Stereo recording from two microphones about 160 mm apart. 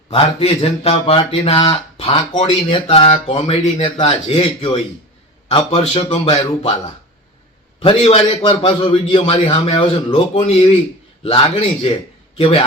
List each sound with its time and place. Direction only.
0.1 s speech: 35° left (ahead or behind)
7.8 s speech: 35° left (ahead or behind)